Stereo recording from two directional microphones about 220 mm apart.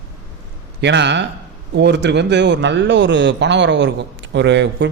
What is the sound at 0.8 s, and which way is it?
A man's voice, 50° right (ahead or behind).